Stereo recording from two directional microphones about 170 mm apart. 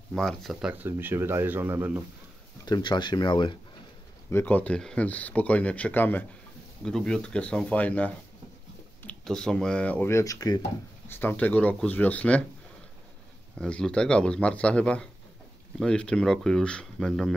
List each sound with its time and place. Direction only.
0.1 s speech: 5° left (ahead or behind)
2.6 s speech: 25° left (ahead or behind)
4.3 s speech: 10° left (ahead or behind)
11.1 s speech: 10° left (ahead or behind)
13.6 s speech: 5° left (ahead or behind)